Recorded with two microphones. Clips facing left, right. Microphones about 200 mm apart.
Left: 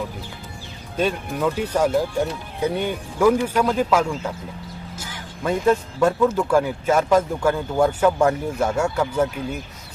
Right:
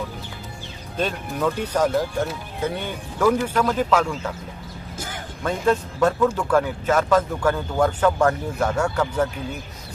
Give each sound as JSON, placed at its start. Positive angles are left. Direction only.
{"t": 0.9, "sound": "speech", "side_deg": 5}
{"t": 4.9, "sound": "a sound", "side_deg": -55}
{"t": 5.4, "sound": "speech", "side_deg": 5}